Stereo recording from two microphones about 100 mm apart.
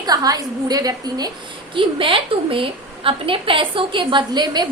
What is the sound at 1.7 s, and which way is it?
A woman's voice, 60° right (ahead or behind).